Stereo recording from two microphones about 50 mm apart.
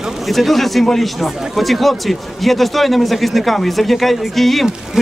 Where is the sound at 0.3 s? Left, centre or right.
Centre.